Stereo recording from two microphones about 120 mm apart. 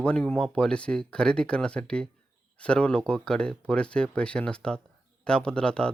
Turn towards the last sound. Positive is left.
turn(degrees=5)  # may be behind; listen again after turning